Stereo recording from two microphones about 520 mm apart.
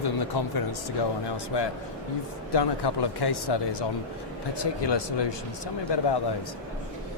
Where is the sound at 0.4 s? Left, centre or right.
Left.